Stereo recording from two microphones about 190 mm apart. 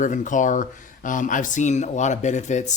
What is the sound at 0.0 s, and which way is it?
Speech, 40° left (ahead or behind).